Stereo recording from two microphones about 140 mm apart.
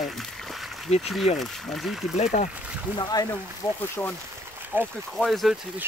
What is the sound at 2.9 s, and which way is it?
Speech, 25° left (ahead or behind).